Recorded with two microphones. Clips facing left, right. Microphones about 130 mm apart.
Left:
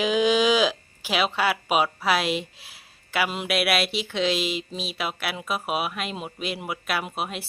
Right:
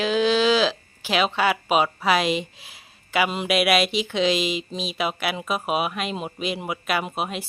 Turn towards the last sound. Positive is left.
turn(degrees=0)  # may be behind; listen again after turning